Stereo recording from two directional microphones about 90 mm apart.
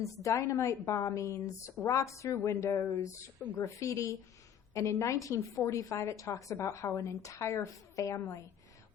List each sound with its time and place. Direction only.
0.0 s a woman's voice: 35° left (ahead or behind)